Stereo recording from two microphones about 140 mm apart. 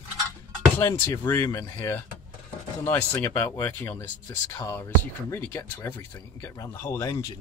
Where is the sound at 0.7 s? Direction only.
20° left (ahead or behind).